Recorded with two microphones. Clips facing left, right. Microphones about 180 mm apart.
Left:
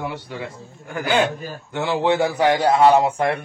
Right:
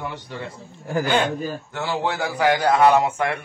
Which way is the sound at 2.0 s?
25° left (ahead or behind).